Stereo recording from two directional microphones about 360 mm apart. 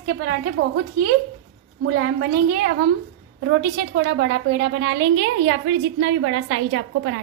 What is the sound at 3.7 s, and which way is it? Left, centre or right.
A woman's voice, right.